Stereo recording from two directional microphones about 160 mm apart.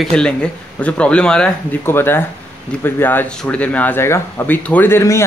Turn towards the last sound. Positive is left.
turn(degrees=15)  # may be behind; listen again after turning